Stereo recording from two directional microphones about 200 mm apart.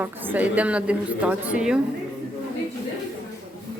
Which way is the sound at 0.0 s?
10° right (ahead or behind).